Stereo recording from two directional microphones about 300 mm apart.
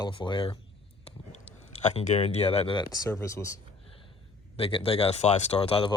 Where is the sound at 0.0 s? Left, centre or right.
Centre.